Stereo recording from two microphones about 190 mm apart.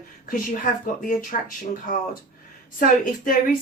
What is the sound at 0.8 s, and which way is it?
Speech, 45° left (ahead or behind).